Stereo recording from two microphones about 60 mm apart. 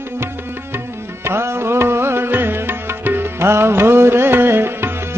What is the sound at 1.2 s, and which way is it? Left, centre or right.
Music, right.